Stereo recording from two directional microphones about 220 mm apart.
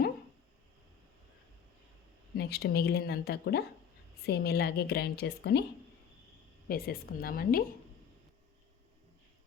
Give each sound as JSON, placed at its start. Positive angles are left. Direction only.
{"t": 2.4, "sound": "a woman's voice", "side_deg": 45}
{"t": 6.7, "sound": "a woman's voice", "side_deg": 45}